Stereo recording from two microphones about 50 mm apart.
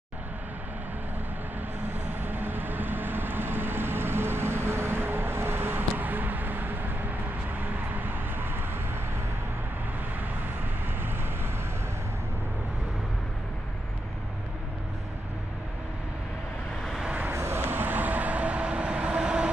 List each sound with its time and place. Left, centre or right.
2.2 s vehicle: right
17.3 s vehicle: right